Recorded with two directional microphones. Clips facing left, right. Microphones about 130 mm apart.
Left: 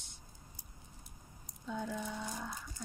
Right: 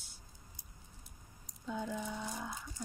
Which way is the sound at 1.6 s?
5° right (ahead or behind).